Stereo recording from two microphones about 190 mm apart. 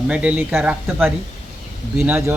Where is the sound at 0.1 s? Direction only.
5° right (ahead or behind).